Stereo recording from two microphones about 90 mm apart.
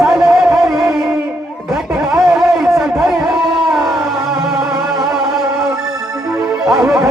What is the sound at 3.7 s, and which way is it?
Music, 5° right (ahead or behind).